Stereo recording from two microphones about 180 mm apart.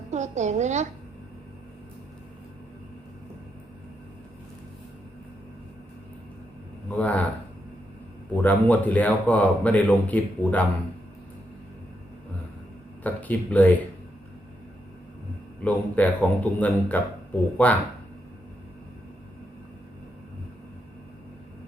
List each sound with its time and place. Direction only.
0.1 s a woman's voice: 40° right (ahead or behind)
6.9 s a man's voice: 10° left (ahead or behind)
8.4 s a man's voice: 10° left (ahead or behind)
13.0 s a man's voice: 10° left (ahead or behind)
15.6 s a man's voice: 10° left (ahead or behind)